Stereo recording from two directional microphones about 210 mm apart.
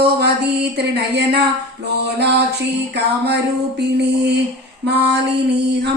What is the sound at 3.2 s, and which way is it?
Music, 55° right (ahead or behind).